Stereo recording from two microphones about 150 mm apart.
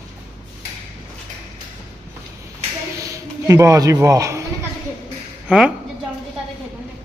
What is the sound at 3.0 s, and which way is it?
Speech, 20° right (ahead or behind).